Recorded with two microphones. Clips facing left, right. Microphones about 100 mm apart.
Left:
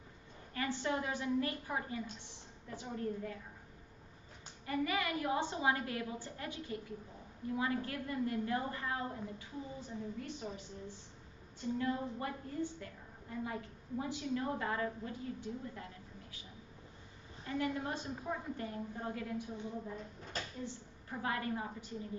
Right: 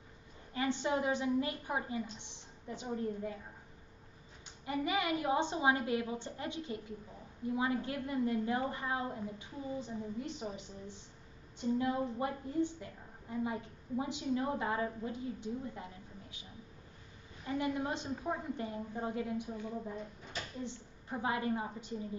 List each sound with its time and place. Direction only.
0.6 s a woman's voice: 20° right (ahead or behind)
4.6 s a woman's voice: 20° right (ahead or behind)
17.5 s a woman's voice: 20° right (ahead or behind)
20.6 s a woman's voice: 20° right (ahead or behind)